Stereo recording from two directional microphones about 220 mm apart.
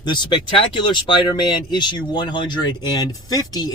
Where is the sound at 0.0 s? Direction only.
20° left (ahead or behind).